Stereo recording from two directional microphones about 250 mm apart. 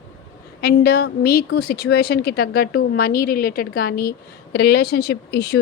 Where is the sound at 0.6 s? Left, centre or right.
Left.